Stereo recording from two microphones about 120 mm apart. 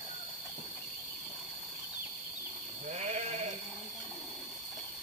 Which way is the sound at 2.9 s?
70° right (ahead or behind).